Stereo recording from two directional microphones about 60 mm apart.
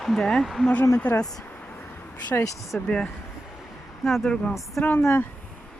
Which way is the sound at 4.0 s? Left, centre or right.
Centre.